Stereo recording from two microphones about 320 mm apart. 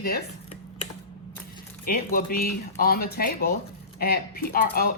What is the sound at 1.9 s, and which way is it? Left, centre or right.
Speech, left.